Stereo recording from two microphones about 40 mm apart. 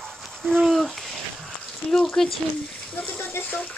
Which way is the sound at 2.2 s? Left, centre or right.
Centre.